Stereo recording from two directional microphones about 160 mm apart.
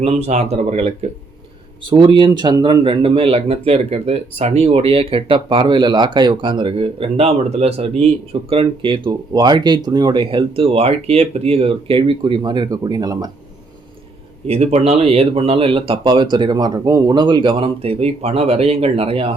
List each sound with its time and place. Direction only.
0.0 s speech: 45° right (ahead or behind)
1.8 s speech: 30° right (ahead or behind)
14.4 s speech: 40° right (ahead or behind)